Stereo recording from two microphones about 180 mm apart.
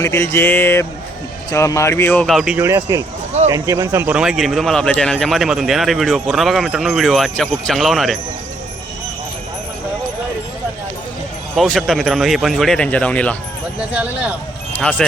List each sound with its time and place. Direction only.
0.0 s speech: 15° left (ahead or behind)
2.6 s speech: 15° right (ahead or behind)
4.2 s speech: centre (ahead or behind)
11.5 s speech: centre (ahead or behind)
14.8 s speech: 5° left (ahead or behind)